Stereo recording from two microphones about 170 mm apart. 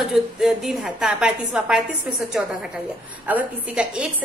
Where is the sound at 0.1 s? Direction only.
Centre (ahead or behind).